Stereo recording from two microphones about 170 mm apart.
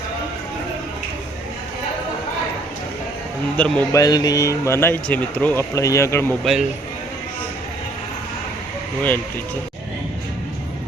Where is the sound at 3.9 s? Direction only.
20° left (ahead or behind).